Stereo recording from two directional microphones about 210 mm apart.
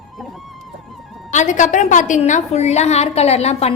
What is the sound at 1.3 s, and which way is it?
A woman's voice, 35° left (ahead or behind).